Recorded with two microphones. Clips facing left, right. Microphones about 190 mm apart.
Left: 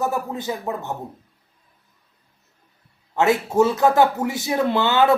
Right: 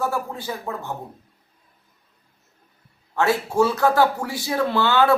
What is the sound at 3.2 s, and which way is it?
A man's voice, 20° left (ahead or behind).